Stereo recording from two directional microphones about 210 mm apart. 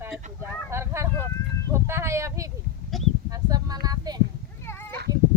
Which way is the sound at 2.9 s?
Centre (ahead or behind).